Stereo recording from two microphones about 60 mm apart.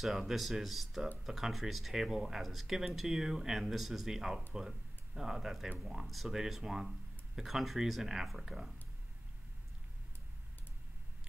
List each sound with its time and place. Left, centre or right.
0.0 s speech: centre